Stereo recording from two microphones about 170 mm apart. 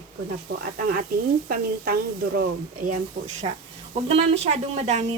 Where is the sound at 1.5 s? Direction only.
60° right (ahead or behind).